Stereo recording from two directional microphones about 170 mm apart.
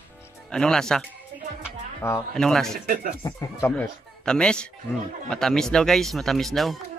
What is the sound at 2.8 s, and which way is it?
Speech, 50° right (ahead or behind).